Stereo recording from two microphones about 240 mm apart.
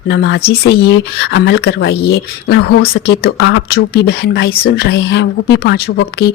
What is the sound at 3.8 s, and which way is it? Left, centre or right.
A woman's voice, left.